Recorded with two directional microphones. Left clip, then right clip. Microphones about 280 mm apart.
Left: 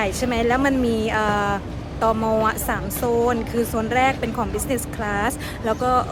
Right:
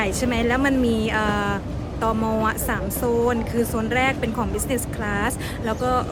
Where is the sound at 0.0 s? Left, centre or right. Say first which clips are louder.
Left 1 dB; centre.